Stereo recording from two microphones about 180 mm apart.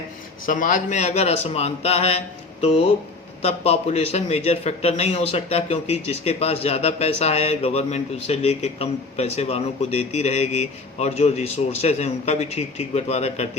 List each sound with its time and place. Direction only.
0.4 s a man's voice: 50° left (ahead or behind)